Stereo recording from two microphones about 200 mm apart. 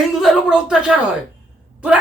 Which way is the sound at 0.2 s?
5° right (ahead or behind).